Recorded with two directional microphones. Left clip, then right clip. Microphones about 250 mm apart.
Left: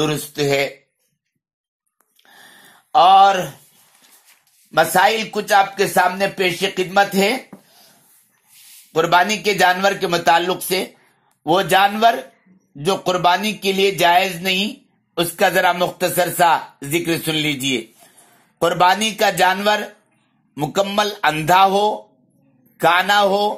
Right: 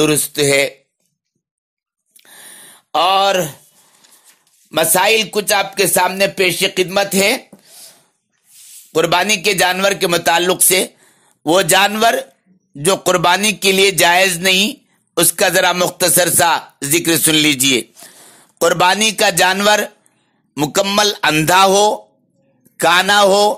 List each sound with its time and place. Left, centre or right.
0.0 s speech: right
2.1 s a sound: right
4.6 s speech: right
8.9 s speech: right